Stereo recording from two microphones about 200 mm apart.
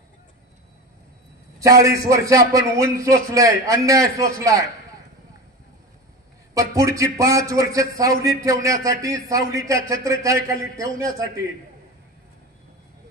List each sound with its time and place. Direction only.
1.6 s a man's voice: 15° right (ahead or behind)
6.5 s a man's voice: 15° right (ahead or behind)